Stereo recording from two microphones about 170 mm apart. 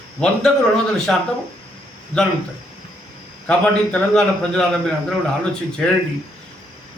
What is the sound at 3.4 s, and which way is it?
A man's voice, 5° left (ahead or behind).